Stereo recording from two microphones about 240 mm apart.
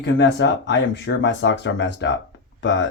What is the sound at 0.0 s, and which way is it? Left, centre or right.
Speech, left.